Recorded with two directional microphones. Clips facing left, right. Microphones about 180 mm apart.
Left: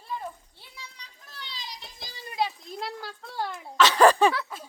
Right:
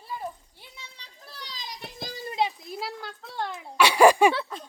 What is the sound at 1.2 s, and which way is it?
Children playing, 35° right (ahead or behind).